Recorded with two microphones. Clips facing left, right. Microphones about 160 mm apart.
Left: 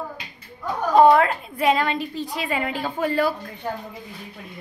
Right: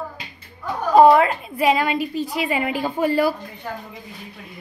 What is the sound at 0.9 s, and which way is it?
A woman's voice, 5° right (ahead or behind).